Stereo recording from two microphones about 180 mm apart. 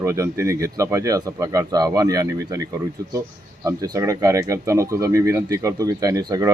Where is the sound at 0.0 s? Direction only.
15° right (ahead or behind).